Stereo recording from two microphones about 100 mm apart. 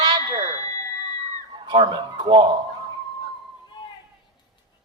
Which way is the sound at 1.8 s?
45° right (ahead or behind).